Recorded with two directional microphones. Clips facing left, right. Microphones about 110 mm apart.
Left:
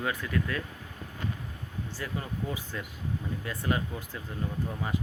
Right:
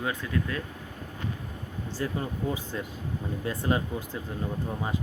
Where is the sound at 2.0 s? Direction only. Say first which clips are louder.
Right 5 dB; 30° right (ahead or behind).